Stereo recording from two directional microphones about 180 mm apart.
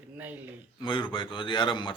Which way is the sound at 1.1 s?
25° left (ahead or behind).